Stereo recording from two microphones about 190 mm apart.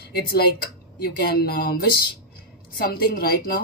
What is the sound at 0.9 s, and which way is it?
Speech, 55° left (ahead or behind).